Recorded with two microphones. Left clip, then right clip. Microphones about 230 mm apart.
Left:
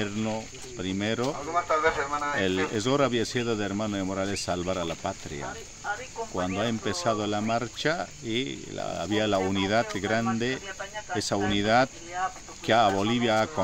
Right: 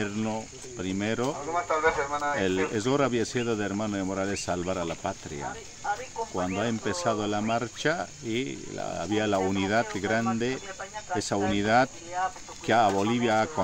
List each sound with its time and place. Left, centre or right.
0.0 s speech: centre
1.5 s speech: left
2.3 s speech: centre
5.9 s cricket: left
6.3 s speech: centre
12.2 s speech: left
12.6 s speech: centre